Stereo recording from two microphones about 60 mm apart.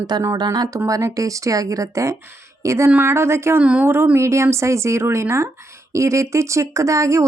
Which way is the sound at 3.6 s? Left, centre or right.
Centre.